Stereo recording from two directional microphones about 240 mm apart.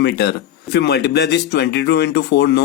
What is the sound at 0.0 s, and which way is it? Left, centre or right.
Speech, left.